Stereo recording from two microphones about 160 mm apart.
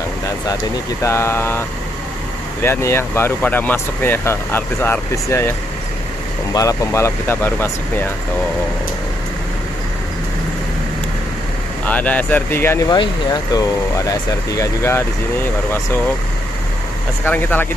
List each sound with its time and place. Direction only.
1.0 s speech: 15° left (ahead or behind)
2.6 s speech: 15° left (ahead or behind)
6.5 s speech: 20° left (ahead or behind)
11.8 s speech: 10° left (ahead or behind)
12.9 s speech: 25° left (ahead or behind)
17.2 s speech: 10° left (ahead or behind)